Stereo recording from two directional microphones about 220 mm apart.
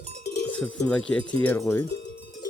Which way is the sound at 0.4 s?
10° left (ahead or behind).